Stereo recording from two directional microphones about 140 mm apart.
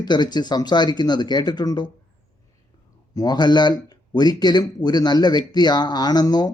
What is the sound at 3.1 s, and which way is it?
Speech, 30° left (ahead or behind).